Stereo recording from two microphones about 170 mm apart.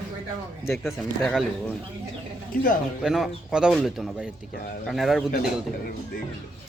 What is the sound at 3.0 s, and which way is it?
A man's voice, centre (ahead or behind).